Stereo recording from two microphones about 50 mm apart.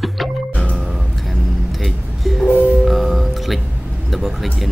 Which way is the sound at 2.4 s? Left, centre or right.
Left.